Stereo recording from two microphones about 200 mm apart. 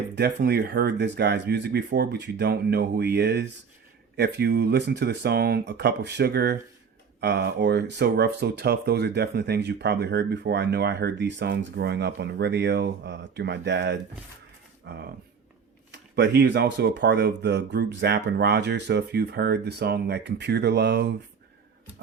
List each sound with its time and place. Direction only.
0.2 s speech: 55° right (ahead or behind)